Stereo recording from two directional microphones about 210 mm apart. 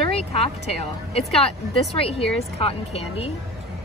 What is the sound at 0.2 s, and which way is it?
Speech, 30° left (ahead or behind).